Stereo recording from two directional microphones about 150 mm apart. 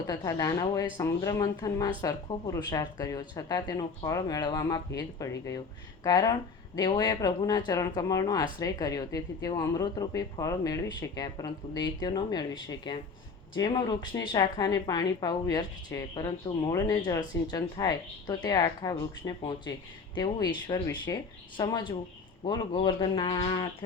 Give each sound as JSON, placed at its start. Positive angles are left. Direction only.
{"t": 0.3, "sound": "speech", "side_deg": 25}